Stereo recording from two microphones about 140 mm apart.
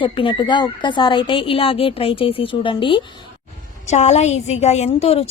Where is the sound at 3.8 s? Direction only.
55° left (ahead or behind).